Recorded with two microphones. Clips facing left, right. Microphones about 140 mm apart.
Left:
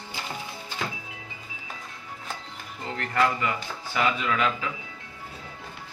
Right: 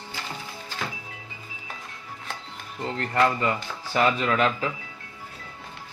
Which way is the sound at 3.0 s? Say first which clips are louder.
Right 2 dB; 30° right (ahead or behind).